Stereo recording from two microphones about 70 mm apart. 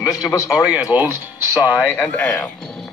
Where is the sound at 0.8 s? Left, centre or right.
Right.